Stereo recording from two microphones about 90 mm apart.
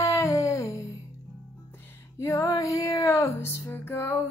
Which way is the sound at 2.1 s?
35° left (ahead or behind).